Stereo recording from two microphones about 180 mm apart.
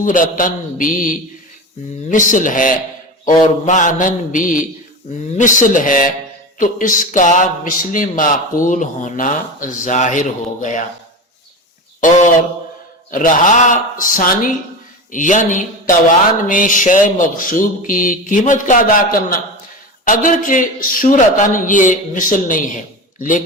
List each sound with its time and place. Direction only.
0.0 s a man's voice: 45° left (ahead or behind)
11.9 s a man's voice: 45° left (ahead or behind)